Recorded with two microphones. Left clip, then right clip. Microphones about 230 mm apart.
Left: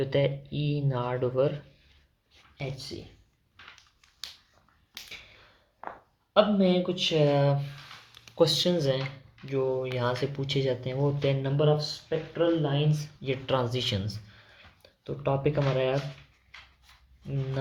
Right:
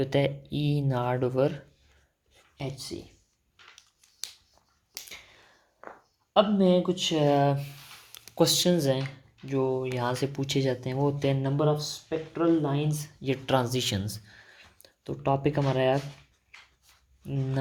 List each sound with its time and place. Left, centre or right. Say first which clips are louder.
0.0 s speech: even; right
6.3 s speech: right 1 dB; right